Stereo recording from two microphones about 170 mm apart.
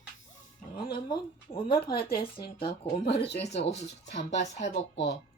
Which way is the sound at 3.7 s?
90° left.